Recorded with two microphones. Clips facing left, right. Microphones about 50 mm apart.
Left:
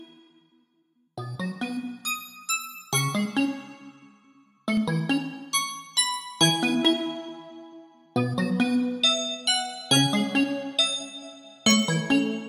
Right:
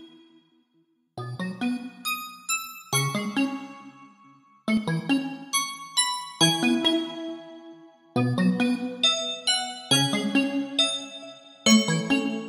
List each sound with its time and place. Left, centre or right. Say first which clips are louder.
1.1 s music: even; centre
4.6 s music: even; centre
10.4 s music: even; right
11.6 s music: right 2 dB; centre